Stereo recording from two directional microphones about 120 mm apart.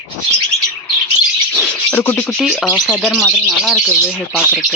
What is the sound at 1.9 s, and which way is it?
Speech, 20° left (ahead or behind).